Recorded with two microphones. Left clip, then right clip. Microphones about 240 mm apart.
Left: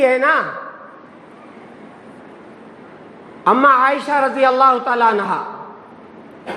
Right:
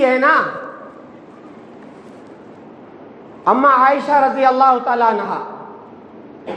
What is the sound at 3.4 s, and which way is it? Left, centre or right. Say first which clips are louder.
A man's voice: even; left.